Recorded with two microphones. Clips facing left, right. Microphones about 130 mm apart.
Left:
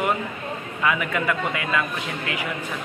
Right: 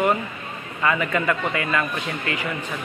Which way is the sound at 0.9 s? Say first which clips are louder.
Right 3 dB; 5° left (ahead or behind).